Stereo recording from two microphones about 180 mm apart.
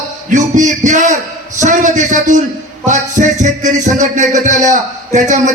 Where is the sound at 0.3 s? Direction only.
45° right (ahead or behind).